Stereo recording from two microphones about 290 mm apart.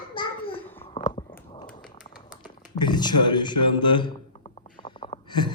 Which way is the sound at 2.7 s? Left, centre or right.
Centre.